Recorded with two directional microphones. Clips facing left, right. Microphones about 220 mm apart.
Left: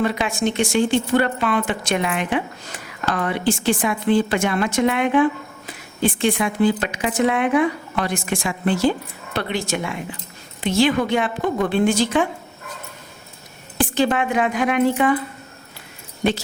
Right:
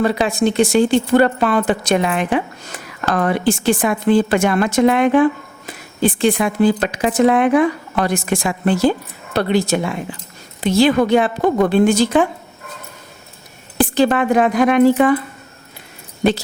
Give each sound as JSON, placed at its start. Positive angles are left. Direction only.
{"t": 0.0, "sound": "a woman's voice", "side_deg": -35}
{"t": 13.7, "sound": "speech", "side_deg": -40}